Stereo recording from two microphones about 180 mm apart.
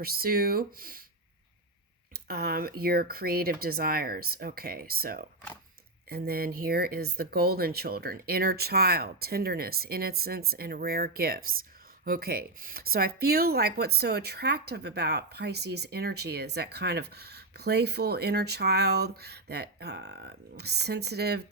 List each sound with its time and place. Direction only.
0.0 s speech: 55° right (ahead or behind)
2.2 s speech: 60° right (ahead or behind)